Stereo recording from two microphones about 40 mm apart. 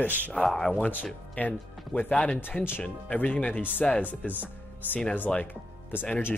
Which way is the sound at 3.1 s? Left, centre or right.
Left.